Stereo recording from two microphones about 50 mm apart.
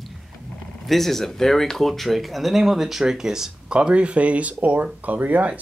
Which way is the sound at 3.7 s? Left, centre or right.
Right.